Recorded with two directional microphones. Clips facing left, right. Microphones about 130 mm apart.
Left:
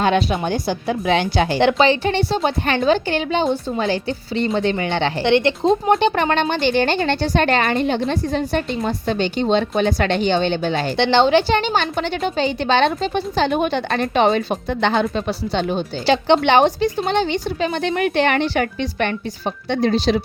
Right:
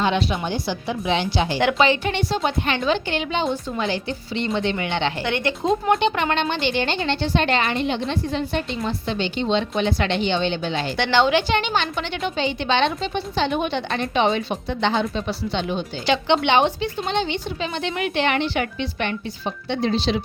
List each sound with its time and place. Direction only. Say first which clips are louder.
0.0 s a woman's voice: left 4 dB; 50° left (ahead or behind)
1.5 s a woman's voice: left 3 dB; 30° left (ahead or behind); by 10.8 s 50° left (ahead or behind)
10.9 s a woman's voice: left 4 dB; 30° left (ahead or behind); by 20.2 s 45° left (ahead or behind)